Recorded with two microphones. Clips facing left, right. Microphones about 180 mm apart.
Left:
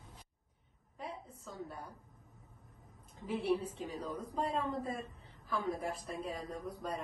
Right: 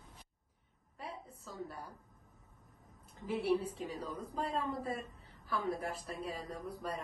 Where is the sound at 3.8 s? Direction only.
Centre (ahead or behind).